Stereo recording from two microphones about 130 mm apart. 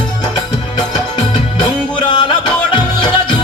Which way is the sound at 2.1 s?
40° left (ahead or behind).